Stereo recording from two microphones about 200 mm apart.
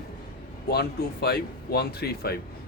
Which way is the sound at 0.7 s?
55° left (ahead or behind).